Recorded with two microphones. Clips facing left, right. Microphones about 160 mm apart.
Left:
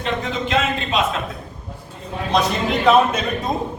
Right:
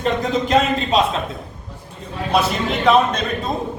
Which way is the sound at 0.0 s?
40° right (ahead or behind).